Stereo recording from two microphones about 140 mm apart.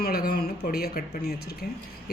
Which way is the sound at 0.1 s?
90° left.